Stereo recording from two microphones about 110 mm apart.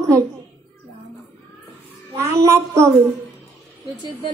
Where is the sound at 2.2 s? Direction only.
25° right (ahead or behind).